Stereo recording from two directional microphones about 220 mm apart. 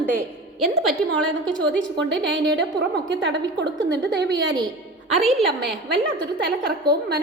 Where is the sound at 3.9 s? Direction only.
55° right (ahead or behind).